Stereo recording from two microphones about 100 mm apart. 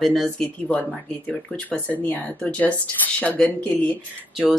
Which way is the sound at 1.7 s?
15° left (ahead or behind).